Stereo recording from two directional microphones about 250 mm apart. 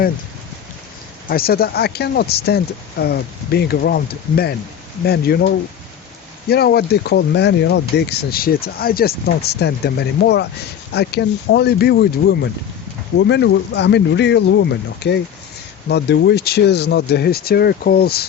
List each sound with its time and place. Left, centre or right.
1.3 s speech: left